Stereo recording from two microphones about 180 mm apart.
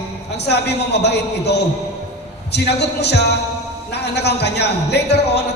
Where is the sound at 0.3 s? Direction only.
70° left (ahead or behind).